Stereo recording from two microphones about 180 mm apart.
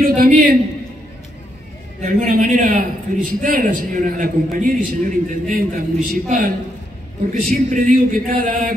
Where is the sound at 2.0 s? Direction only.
45° right (ahead or behind).